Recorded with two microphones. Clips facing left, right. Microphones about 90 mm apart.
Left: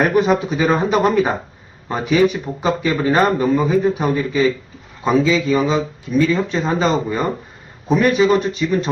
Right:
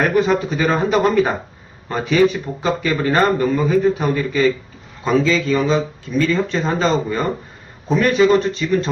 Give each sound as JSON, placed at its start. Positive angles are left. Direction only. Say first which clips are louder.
{"t": 0.1, "sound": "speech", "louder": "left 1 dB", "side_deg": 15}